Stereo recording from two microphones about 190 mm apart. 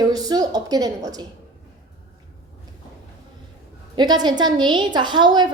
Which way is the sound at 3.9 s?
20° right (ahead or behind).